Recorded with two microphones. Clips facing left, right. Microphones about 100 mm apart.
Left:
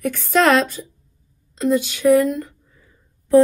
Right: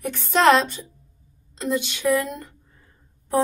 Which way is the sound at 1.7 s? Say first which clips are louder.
Left 7 dB; 50° left (ahead or behind).